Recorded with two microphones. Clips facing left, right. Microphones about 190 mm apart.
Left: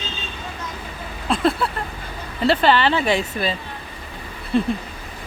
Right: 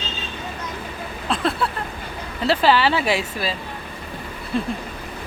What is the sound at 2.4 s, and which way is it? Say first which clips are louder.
A woman's voice: left 1 dB; centre (ahead or behind).